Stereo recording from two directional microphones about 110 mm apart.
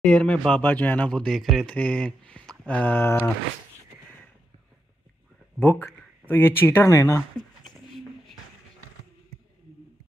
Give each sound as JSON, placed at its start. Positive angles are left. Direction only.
{"t": 0.0, "sound": "speech", "side_deg": 5}
{"t": 5.6, "sound": "speech", "side_deg": 20}
{"t": 7.7, "sound": "a sound", "side_deg": 0}